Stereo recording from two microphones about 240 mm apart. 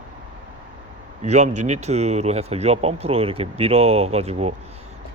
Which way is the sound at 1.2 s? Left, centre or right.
Right.